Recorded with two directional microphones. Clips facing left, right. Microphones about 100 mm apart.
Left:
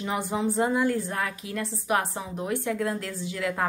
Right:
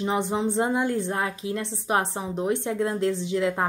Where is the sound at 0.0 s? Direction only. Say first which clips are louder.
Right 3 dB; 25° right (ahead or behind).